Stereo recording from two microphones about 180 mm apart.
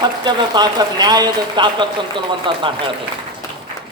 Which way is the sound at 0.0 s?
25° right (ahead or behind).